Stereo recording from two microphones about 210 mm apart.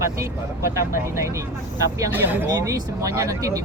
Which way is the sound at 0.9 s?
15° right (ahead or behind).